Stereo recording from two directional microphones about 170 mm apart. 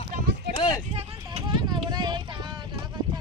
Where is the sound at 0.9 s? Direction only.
30° right (ahead or behind).